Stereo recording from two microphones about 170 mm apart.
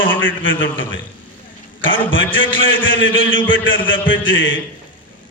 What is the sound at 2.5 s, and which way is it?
A man's voice, 90° left.